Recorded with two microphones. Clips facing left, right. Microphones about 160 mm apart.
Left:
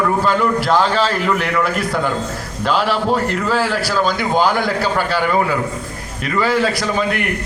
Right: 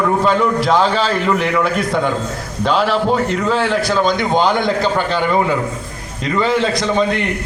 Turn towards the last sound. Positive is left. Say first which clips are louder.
# right 1 dB
turn(degrees=-25)  # may be behind; listen again after turning